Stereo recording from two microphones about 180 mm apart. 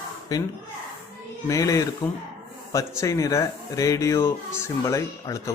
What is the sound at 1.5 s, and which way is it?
Speech, 20° left (ahead or behind).